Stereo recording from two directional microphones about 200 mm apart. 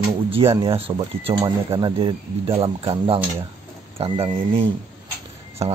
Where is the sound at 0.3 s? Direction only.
25° right (ahead or behind).